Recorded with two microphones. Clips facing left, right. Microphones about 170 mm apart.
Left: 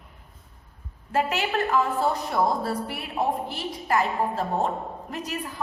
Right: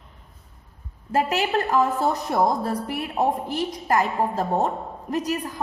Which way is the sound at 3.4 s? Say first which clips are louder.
Right 4 dB; 40° right (ahead or behind).